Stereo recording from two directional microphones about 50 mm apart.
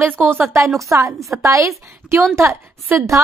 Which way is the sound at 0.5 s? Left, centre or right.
Right.